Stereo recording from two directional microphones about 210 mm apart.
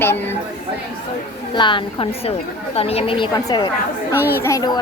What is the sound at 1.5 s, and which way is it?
A woman's voice, 25° left (ahead or behind).